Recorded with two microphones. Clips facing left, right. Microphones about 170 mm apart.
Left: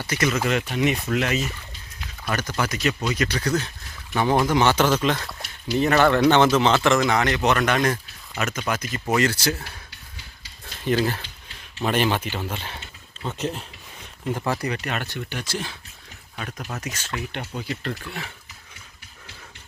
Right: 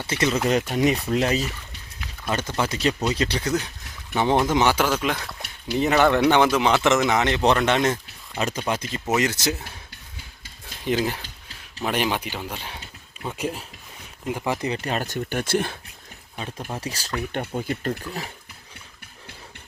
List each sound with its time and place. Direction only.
0.1 s speech: 25° right (ahead or behind)
0.4 s speech: 35° right (ahead or behind); by 4.7 s 20° right (ahead or behind)
4.7 s speech: 10° right (ahead or behind)
10.7 s speech: 15° right (ahead or behind)
14.7 s speech: 30° right (ahead or behind); by 15.8 s 55° right (ahead or behind)
16.4 s speech: 25° right (ahead or behind)
17.4 s speech: 50° right (ahead or behind)